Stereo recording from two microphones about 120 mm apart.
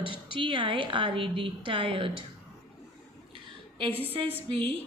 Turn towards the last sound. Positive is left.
turn(degrees=-50)  # may be behind; listen again after turning